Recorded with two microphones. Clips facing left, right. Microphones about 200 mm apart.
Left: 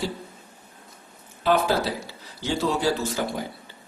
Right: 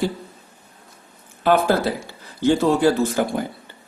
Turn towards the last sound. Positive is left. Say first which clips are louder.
# right 6 dB
turn(degrees=-55)  # may be behind; listen again after turning